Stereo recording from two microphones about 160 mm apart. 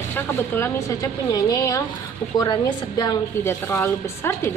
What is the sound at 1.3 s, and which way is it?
A woman's voice, 20° left (ahead or behind).